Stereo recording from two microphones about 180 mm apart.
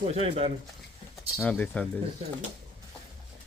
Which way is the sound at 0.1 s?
35° right (ahead or behind).